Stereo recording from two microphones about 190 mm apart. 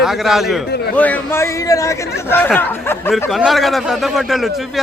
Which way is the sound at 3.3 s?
Centre (ahead or behind).